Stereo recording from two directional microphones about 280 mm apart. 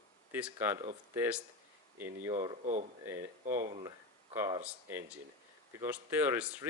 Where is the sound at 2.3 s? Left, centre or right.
Right.